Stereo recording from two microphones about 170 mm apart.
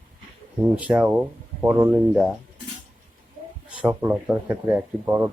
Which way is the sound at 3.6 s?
10° right (ahead or behind).